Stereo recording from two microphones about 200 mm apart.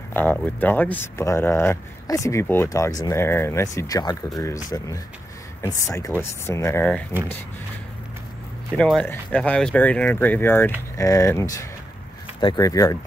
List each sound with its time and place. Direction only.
0.1 s speech: 10° left (ahead or behind)
8.7 s speech: 5° left (ahead or behind)